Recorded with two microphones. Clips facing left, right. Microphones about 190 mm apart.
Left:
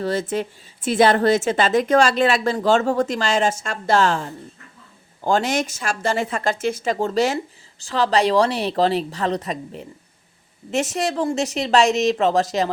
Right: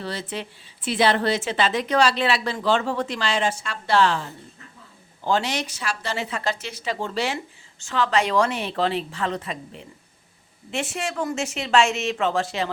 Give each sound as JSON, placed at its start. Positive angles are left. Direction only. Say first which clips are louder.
{"t": 0.0, "sound": "a woman's voice", "louder": "left 8 dB", "side_deg": 45}
{"t": 5.2, "sound": "a woman's voice", "louder": "left 4 dB", "side_deg": 45}